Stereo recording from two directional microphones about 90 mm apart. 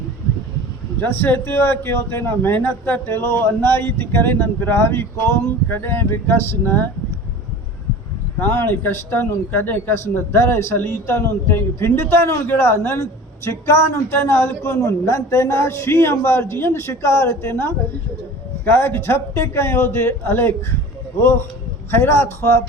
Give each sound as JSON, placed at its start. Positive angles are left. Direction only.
{"t": 1.0, "sound": "a man's voice", "side_deg": 25}
{"t": 8.4, "sound": "a man's voice", "side_deg": 25}
{"t": 21.8, "sound": "a man's voice", "side_deg": 25}